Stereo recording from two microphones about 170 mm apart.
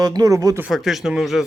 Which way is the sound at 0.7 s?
Centre (ahead or behind).